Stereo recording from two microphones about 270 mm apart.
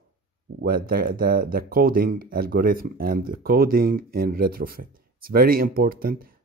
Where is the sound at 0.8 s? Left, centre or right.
Right.